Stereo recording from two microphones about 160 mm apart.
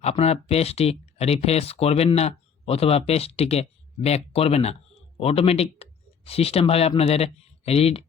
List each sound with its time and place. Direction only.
0.0 s speech: 40° left (ahead or behind)